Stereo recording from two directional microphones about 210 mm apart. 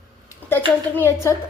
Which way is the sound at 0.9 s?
10° left (ahead or behind).